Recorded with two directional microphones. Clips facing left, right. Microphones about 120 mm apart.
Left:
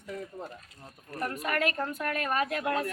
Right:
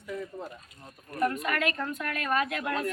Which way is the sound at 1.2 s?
35° left (ahead or behind).